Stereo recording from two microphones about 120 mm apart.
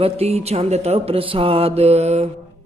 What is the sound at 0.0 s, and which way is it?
Music, 60° right (ahead or behind).